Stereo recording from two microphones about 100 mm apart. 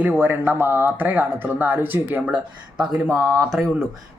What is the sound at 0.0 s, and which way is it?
Speech, 20° right (ahead or behind).